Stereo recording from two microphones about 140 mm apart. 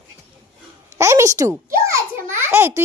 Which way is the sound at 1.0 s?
20° right (ahead or behind).